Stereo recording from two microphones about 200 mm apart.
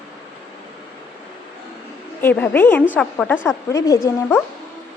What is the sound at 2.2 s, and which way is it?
A woman's voice, 10° left (ahead or behind).